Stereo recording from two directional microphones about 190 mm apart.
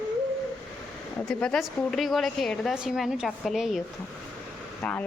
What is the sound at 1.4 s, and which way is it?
A woman's voice, centre (ahead or behind).